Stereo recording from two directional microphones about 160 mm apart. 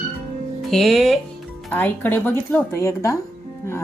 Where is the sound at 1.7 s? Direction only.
10° left (ahead or behind).